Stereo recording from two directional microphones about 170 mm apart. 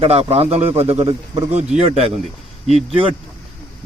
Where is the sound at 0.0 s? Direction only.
35° right (ahead or behind).